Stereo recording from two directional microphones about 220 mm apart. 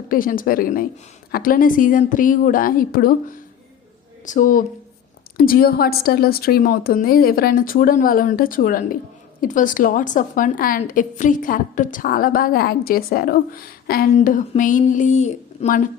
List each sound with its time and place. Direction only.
0.1 s a woman's voice: 40° left (ahead or behind)